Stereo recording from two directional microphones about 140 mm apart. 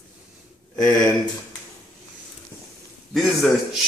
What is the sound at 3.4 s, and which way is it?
Speech, centre (ahead or behind).